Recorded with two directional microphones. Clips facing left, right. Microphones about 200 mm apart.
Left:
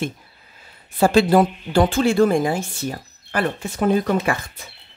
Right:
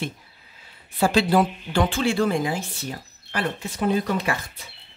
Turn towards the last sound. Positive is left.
turn(degrees=50)  # may be behind; listen again after turning